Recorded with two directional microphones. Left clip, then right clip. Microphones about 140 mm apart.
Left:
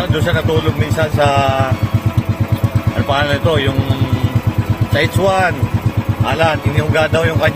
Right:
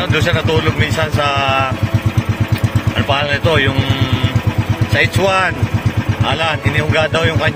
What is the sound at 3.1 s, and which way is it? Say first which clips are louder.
Speech: left 2 dB; 20° left (ahead or behind).